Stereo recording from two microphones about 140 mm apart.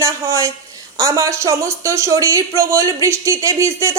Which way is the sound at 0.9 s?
25° right (ahead or behind).